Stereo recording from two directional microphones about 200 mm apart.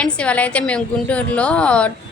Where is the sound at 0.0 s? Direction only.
5° left (ahead or behind).